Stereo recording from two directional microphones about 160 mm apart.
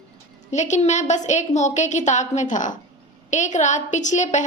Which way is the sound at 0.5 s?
45° left (ahead or behind).